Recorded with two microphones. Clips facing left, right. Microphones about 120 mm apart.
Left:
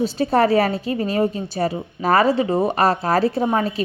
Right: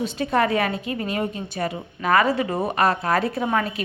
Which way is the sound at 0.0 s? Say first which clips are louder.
Left 4 dB; 35° left (ahead or behind).